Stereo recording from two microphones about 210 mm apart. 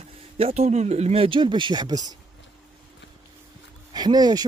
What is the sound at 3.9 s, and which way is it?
Speech, 20° right (ahead or behind).